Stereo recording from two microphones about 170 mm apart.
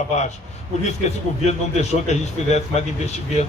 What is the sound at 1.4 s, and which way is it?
A man's voice, 40° left (ahead or behind).